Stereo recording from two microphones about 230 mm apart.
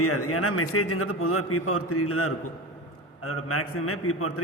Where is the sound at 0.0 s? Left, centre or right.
Left.